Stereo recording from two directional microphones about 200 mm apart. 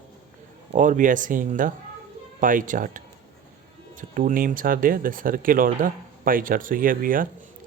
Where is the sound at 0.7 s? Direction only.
40° right (ahead or behind).